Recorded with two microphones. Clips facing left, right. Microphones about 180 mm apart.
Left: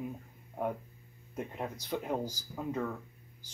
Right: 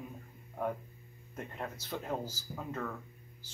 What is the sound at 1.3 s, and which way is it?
Speech, 10° left (ahead or behind).